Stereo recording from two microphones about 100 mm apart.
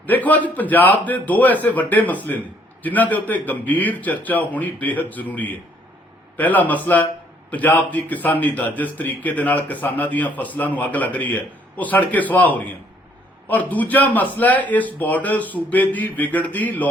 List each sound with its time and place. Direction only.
0.0 s a man's voice: 15° left (ahead or behind)